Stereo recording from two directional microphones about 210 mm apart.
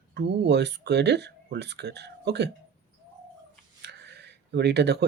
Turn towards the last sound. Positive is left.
turn(degrees=-55)  # may be behind; listen again after turning